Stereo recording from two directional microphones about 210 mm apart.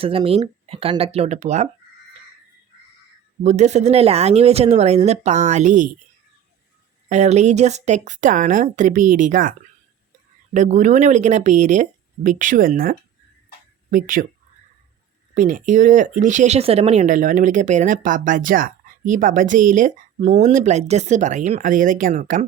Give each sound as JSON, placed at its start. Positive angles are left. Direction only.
{"t": 0.0, "sound": "speech", "side_deg": -25}
{"t": 3.4, "sound": "speech", "side_deg": -35}
{"t": 7.1, "sound": "speech", "side_deg": -30}
{"t": 15.4, "sound": "speech", "side_deg": -40}